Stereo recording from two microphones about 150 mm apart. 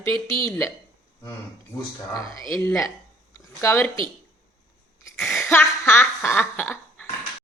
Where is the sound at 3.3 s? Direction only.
15° left (ahead or behind).